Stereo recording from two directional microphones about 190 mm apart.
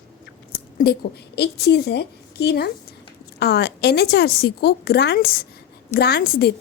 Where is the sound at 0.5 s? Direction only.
55° left (ahead or behind).